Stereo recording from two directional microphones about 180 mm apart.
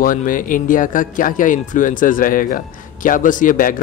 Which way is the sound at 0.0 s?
50° left (ahead or behind).